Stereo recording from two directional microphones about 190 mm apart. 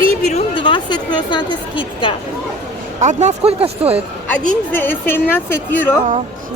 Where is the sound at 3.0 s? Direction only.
40° right (ahead or behind).